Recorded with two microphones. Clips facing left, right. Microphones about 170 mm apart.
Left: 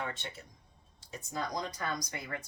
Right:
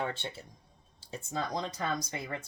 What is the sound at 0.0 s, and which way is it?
Speech, 30° right (ahead or behind).